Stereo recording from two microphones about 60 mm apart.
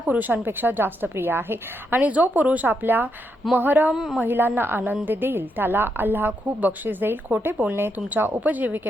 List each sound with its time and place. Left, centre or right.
0.1 s a woman's voice: right
3.9 s speech: centre
4.2 s a woman's voice: right